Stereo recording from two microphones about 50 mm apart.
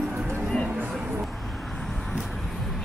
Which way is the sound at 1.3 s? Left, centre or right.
Centre.